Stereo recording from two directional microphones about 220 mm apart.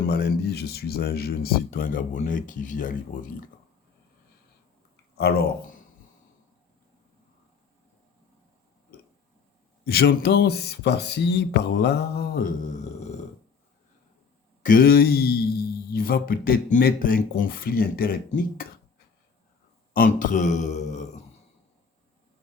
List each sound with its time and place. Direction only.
0.1 s speech: 50° left (ahead or behind)
5.1 s speech: 45° left (ahead or behind)
9.8 s speech: 45° left (ahead or behind)
14.6 s speech: 40° left (ahead or behind)
19.9 s speech: 35° left (ahead or behind)